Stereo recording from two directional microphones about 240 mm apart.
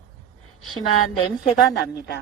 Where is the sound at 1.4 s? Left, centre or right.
Centre.